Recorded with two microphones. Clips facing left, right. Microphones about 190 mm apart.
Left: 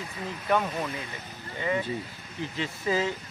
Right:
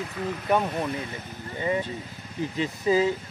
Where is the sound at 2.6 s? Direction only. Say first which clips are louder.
Right 5 dB; 15° right (ahead or behind).